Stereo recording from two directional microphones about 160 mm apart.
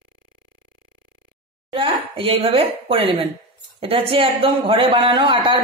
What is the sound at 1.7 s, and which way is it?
A man's voice, 35° right (ahead or behind).